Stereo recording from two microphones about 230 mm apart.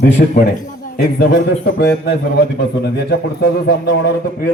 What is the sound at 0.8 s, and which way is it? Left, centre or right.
A man's voice, left.